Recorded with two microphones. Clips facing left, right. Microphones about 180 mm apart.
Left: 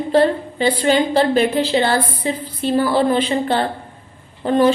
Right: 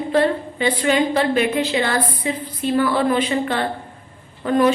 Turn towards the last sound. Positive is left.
turn(degrees=30)  # may be behind; listen again after turning